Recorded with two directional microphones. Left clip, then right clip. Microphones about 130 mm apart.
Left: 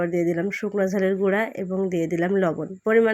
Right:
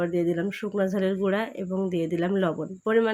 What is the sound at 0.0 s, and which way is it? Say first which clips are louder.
Speech: left 2 dB; 25° left (ahead or behind).